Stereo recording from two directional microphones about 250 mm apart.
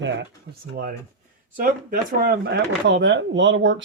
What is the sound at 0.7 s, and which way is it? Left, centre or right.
Speech, right.